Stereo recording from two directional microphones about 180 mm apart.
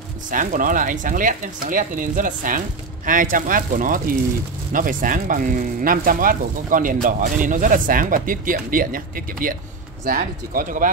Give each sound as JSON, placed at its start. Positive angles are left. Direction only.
{"t": 0.3, "sound": "speech", "side_deg": -45}